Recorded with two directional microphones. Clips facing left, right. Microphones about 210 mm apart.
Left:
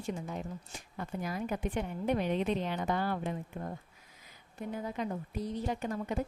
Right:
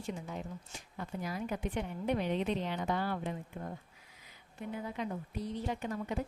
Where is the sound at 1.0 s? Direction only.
50° left (ahead or behind).